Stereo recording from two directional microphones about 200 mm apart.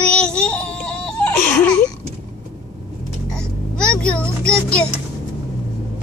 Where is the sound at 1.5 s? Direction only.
5° left (ahead or behind).